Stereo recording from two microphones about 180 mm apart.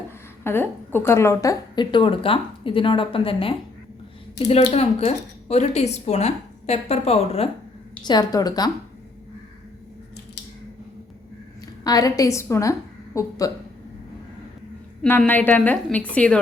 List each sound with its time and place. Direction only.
0.4 s a woman's voice: 10° left (ahead or behind); by 7.5 s 35° left (ahead or behind)
8.0 s a woman's voice: 25° left (ahead or behind)
11.8 s a woman's voice: 20° left (ahead or behind)
15.0 s a woman's voice: 10° left (ahead or behind)